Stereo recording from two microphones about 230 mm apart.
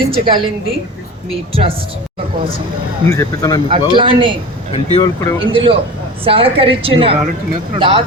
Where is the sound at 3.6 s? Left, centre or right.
Right.